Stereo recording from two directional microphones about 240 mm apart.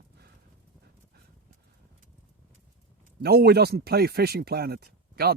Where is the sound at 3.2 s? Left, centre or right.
Right.